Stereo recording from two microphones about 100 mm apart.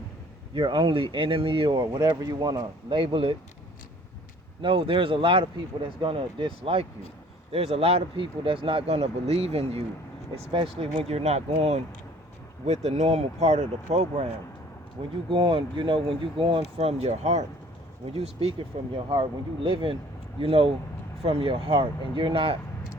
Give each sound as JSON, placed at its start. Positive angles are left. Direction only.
{"t": 0.5, "sound": "speech", "side_deg": -55}
{"t": 2.0, "sound": "speech", "side_deg": -40}
{"t": 4.6, "sound": "speech", "side_deg": -60}
{"t": 7.5, "sound": "speech", "side_deg": -90}
{"t": 10.3, "sound": "speech", "side_deg": -70}
{"t": 15.3, "sound": "speech", "side_deg": -60}
{"t": 18.1, "sound": "speech", "side_deg": -80}
{"t": 18.7, "sound": "speech", "side_deg": -90}
{"t": 19.1, "sound": "speech", "side_deg": -60}
{"t": 21.2, "sound": "speech", "side_deg": -80}